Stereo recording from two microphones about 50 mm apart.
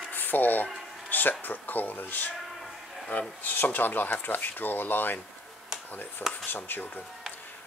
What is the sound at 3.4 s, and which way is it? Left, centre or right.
Speech, left.